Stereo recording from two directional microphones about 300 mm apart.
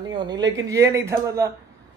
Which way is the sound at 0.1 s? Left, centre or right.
Centre.